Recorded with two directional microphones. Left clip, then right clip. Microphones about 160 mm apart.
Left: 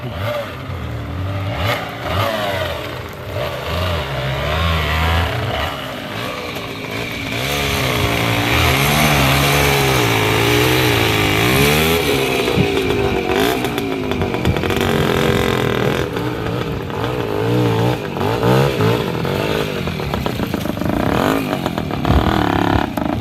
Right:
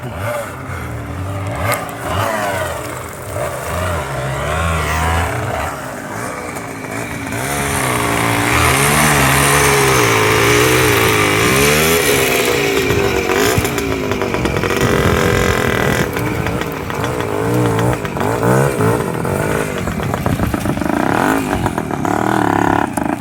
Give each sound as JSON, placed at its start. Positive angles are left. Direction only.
{"t": 1.7, "sound": "vehicle", "side_deg": 15}
{"t": 4.4, "sound": "vehicle", "side_deg": 15}
{"t": 7.4, "sound": "vehicle", "side_deg": 45}
{"t": 17.7, "sound": "vehicle", "side_deg": 25}
{"t": 21.0, "sound": "vehicle", "side_deg": 55}
{"t": 22.1, "sound": "roar", "side_deg": 20}